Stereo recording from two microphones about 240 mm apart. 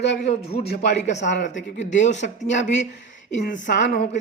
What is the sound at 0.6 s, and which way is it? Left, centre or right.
A woman's voice, left.